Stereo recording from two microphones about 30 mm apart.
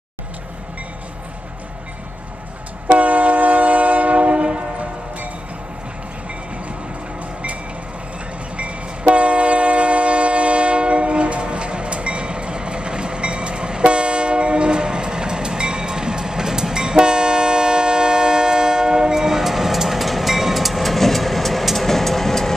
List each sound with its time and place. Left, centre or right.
2.9 s train: right
8.5 s train: right; by 21.6 s centre
21.7 s vehicle: centre